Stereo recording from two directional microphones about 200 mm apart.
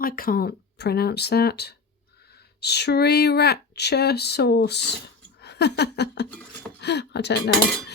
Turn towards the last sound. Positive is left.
turn(degrees=60)  # may be behind; listen again after turning